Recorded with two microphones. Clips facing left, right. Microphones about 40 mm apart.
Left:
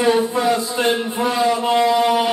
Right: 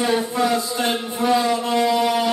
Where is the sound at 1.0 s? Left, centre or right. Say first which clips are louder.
Left 1 dB; left.